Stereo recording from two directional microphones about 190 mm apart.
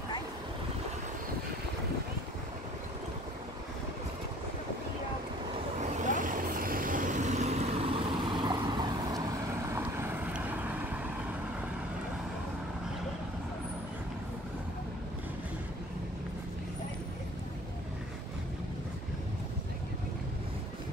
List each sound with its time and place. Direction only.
5.8 s vehicle: 40° right (ahead or behind); by 11.0 s 10° right (ahead or behind)